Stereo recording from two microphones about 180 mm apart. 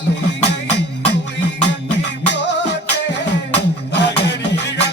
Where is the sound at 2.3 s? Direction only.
75° left (ahead or behind).